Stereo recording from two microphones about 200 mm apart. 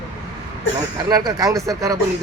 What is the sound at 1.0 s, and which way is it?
Speech, 20° right (ahead or behind).